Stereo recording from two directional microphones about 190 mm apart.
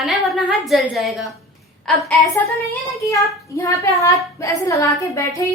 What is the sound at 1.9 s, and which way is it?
Speech, 10° left (ahead or behind).